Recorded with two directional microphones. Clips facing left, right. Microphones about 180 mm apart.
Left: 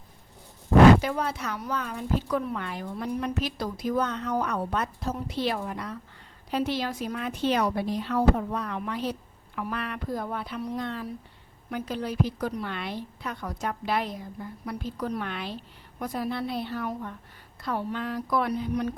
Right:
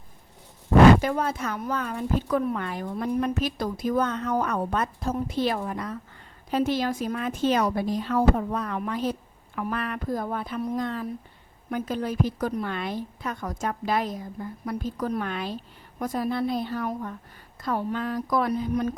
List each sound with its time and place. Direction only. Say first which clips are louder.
1.0 s a woman's voice: right 3 dB; 50° right (ahead or behind)